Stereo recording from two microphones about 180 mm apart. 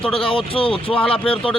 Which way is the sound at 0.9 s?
5° left (ahead or behind).